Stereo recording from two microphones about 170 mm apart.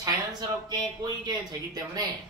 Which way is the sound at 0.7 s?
25° right (ahead or behind).